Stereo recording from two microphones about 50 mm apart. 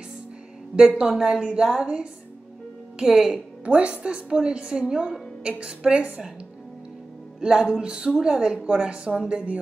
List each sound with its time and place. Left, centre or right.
0.7 s a woman's voice: centre
3.6 s a woman's voice: right
7.3 s a woman's voice: centre